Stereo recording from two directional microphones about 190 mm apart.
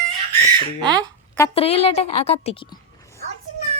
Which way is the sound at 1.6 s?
30° left (ahead or behind).